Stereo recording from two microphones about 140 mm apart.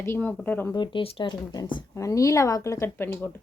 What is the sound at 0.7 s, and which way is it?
Speech, 35° left (ahead or behind).